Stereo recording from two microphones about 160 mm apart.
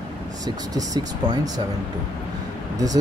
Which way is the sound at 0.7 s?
25° right (ahead or behind).